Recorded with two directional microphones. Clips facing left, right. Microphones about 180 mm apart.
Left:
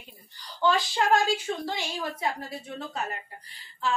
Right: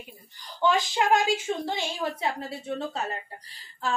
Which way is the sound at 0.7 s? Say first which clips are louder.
Right 1 dB; 20° right (ahead or behind).